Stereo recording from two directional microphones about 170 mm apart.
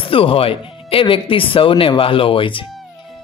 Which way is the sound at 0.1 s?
35° left (ahead or behind).